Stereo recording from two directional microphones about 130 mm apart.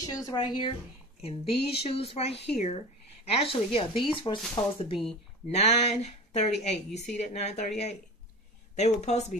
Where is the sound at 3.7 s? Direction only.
40° left (ahead or behind).